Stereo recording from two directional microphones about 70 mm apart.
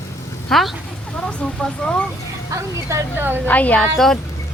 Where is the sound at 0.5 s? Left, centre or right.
Centre.